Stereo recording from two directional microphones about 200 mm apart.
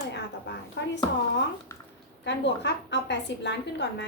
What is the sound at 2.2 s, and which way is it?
A woman's voice, 60° left (ahead or behind).